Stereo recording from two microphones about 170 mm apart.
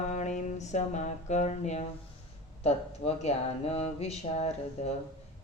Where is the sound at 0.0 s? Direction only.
45° left (ahead or behind).